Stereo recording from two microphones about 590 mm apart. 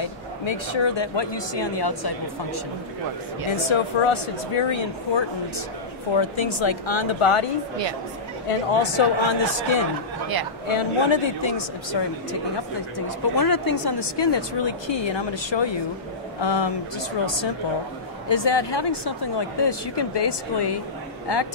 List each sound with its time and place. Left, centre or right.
0.0 s speech: left
3.5 s speech: left
8.5 s speech: left
13.4 s speech: left
18.3 s speech: left